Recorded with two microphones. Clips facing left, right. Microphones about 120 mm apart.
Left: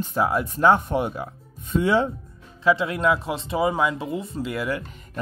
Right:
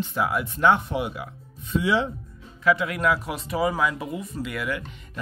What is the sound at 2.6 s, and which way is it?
Speech, 30° left (ahead or behind).